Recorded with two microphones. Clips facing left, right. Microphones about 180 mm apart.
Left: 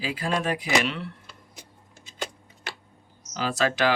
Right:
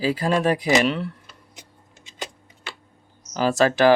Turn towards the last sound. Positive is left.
turn(degrees=-45)  # may be behind; listen again after turning